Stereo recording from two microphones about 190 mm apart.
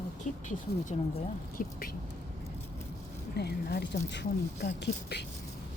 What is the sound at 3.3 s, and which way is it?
Speech, 60° left (ahead or behind).